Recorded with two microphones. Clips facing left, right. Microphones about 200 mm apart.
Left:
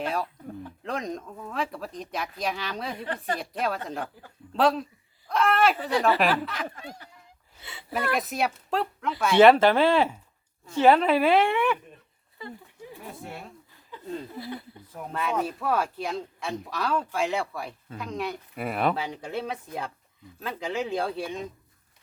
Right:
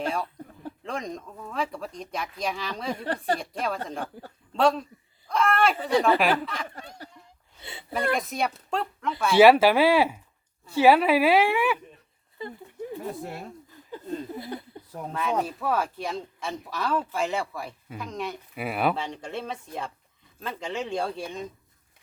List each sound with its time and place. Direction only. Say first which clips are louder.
0.0 s speech: even; centre (ahead or behind)
7.6 s speech: right 1 dB; 25° right (ahead or behind)
7.9 s speech: right 1 dB; 5° left (ahead or behind)
13.9 s a sound: right 5 dB; 40° right (ahead or behind)
15.1 s speech: right 1 dB; centre (ahead or behind)